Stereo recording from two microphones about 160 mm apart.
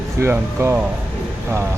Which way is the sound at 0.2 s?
15° right (ahead or behind).